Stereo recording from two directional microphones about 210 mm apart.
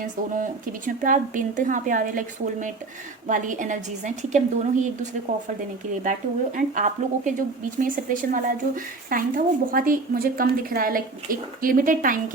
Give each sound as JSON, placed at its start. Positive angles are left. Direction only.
{"t": 0.0, "sound": "a woman's voice", "side_deg": -40}